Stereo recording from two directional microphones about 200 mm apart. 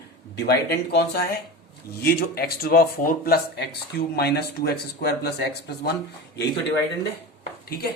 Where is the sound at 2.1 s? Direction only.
50° left (ahead or behind).